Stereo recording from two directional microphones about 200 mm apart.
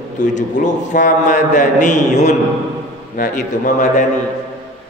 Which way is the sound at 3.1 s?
45° left (ahead or behind).